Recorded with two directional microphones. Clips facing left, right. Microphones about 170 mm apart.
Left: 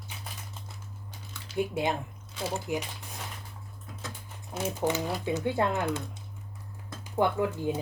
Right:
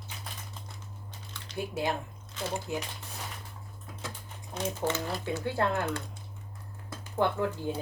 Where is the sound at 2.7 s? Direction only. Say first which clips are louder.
Left 4 dB; 15° left (ahead or behind).